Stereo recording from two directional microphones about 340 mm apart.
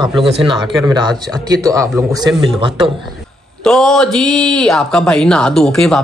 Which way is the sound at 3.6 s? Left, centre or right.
Centre.